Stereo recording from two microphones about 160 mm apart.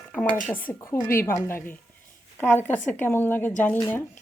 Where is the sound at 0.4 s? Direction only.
10° left (ahead or behind).